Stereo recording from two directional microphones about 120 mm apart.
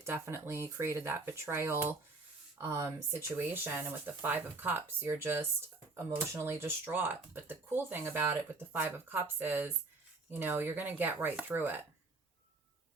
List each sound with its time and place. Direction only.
0.0 s speech: 20° right (ahead or behind)